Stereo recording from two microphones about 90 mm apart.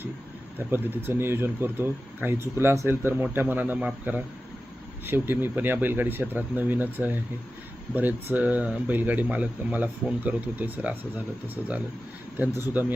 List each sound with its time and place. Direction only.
0.7 s speech: 25° right (ahead or behind)